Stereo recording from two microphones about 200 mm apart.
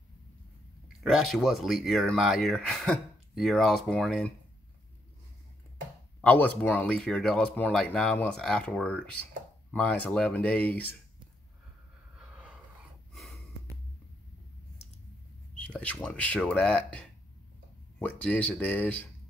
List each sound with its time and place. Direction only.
1.0 s speech: centre (ahead or behind)
6.2 s speech: 10° left (ahead or behind)
12.2 s a sound: 5° right (ahead or behind)
13.1 s snort: centre (ahead or behind)
15.5 s speech: 5° left (ahead or behind)